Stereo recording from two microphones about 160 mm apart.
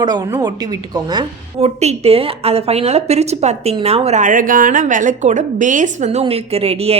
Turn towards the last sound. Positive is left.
turn(degrees=-40)  # may be behind; listen again after turning